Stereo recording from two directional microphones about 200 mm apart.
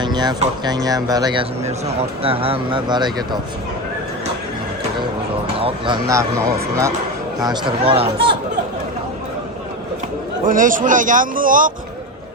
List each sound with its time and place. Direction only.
0.0 s speech: 20° right (ahead or behind)
5.5 s speech: 25° right (ahead or behind)
7.4 s speech: 25° right (ahead or behind)
10.4 s a man's voice: 40° right (ahead or behind)